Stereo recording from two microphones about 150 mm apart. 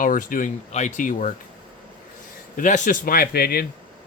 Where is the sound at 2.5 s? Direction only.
60° left (ahead or behind); by 3.7 s 90° left.